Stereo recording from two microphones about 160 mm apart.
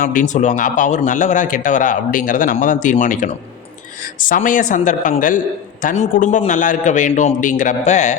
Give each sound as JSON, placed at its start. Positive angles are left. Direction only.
{"t": 0.0, "sound": "a man's voice", "side_deg": 55}